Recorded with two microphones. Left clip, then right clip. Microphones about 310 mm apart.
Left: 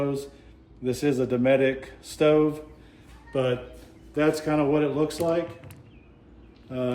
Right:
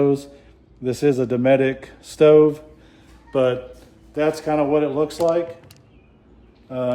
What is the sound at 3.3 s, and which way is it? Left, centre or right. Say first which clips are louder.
Speech: right 7 dB; right.